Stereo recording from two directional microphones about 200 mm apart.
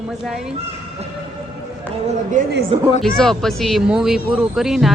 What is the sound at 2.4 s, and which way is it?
Speech, 40° right (ahead or behind).